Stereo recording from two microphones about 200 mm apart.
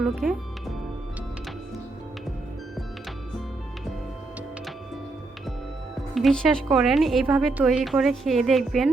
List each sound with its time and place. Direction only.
0.0 s a woman's voice: centre (ahead or behind)
6.1 s a woman's voice: centre (ahead or behind)